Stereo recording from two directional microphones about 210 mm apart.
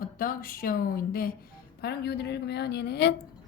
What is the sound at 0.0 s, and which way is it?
A woman's voice, 45° left (ahead or behind).